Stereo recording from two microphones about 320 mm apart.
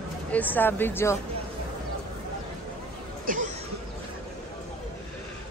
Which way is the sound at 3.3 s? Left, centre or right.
Right.